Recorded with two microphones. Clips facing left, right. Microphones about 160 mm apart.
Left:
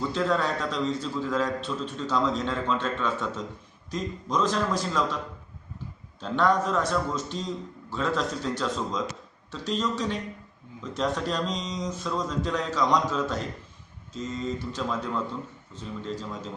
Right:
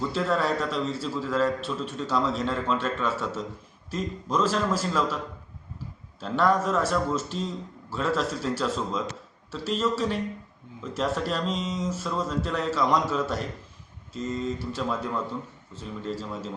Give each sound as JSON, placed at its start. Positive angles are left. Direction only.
{"t": 0.0, "sound": "a man's voice", "side_deg": -5}
{"t": 6.1, "sound": "a man's voice", "side_deg": -5}